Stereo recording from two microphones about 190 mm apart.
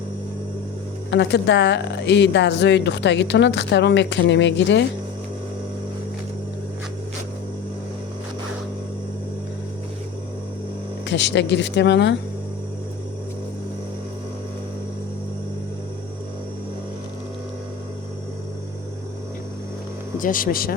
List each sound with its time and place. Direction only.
1.1 s speech: 65° left (ahead or behind)
11.0 s speech: 65° left (ahead or behind)
20.1 s speech: 45° left (ahead or behind)